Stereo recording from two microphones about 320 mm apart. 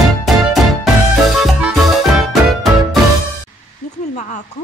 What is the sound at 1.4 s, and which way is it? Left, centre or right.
Music, centre.